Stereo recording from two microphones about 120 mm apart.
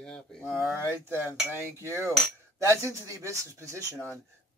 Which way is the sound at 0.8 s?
20° right (ahead or behind).